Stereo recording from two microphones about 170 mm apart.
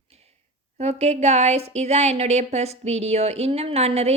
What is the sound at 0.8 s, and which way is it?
A woman's voice, 40° right (ahead or behind).